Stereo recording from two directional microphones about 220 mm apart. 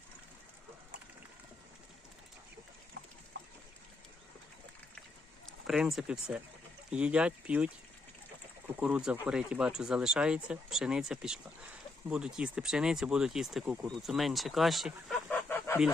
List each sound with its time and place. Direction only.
3.3 s water: 55° right (ahead or behind)
5.6 s speech: centre (ahead or behind)
8.8 s speech: 5° right (ahead or behind)
15.3 s chicken: 10° left (ahead or behind)